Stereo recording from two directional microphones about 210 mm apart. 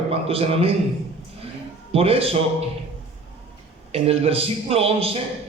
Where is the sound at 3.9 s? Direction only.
30° right (ahead or behind).